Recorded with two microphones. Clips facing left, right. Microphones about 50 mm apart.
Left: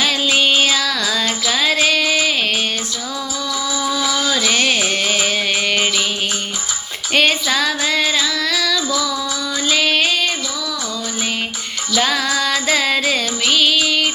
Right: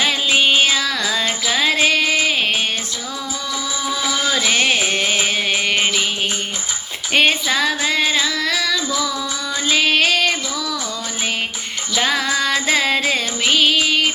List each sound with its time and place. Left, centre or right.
0.0 s music: right
3.8 s music: right
7.1 s child singing: centre
9.6 s music: right
10.0 s child singing: right
11.9 s music: right